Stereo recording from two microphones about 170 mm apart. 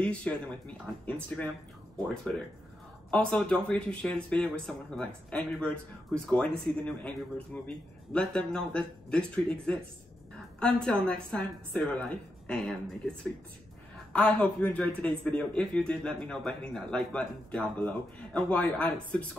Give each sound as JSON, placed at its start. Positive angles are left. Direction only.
{"t": 0.0, "sound": "speech", "side_deg": 5}
{"t": 3.1, "sound": "speech", "side_deg": 5}